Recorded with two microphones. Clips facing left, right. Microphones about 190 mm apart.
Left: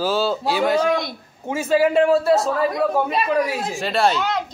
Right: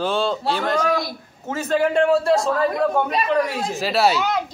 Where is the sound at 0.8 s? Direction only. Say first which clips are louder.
Left 1 dB; 25° left (ahead or behind).